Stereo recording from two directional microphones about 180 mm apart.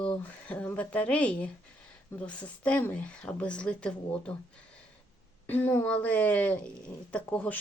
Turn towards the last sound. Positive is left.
turn(degrees=10)  # may be behind; listen again after turning